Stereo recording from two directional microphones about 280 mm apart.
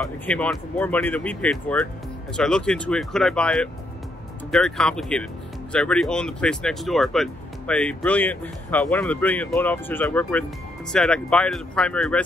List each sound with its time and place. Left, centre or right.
0.0 s speech: centre